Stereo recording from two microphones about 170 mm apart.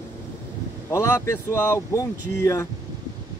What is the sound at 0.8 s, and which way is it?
Speech, 15° left (ahead or behind).